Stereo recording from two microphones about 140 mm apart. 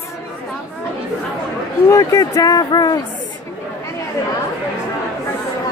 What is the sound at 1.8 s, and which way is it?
Speech, 25° left (ahead or behind).